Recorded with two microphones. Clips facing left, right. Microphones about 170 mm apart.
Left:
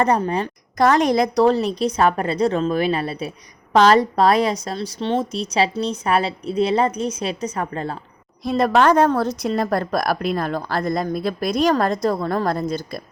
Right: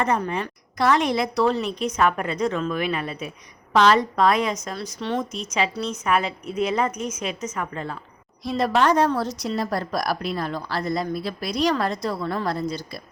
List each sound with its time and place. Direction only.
0.0 s a woman's voice: 35° left (ahead or behind)
8.4 s a woman's voice: 50° left (ahead or behind)